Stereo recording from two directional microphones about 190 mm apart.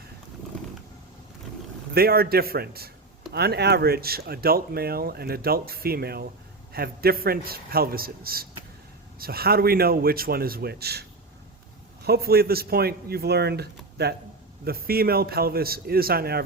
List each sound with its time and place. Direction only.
1.9 s speech: 55° right (ahead or behind)
12.0 s speech: 55° right (ahead or behind)